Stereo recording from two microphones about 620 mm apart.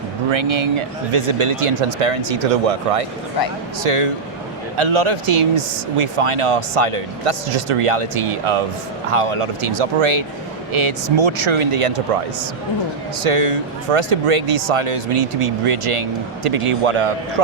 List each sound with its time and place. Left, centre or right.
0.3 s speech: right
13.2 s speech: right
14.8 s speech: right